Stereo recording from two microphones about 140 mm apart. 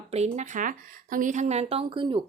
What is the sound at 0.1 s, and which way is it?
Speech, 55° right (ahead or behind).